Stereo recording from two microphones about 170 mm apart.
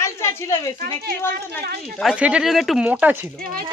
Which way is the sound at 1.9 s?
5° right (ahead or behind).